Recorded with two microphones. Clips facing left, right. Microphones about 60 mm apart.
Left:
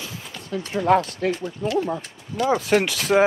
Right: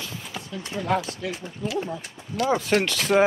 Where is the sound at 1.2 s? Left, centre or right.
Left.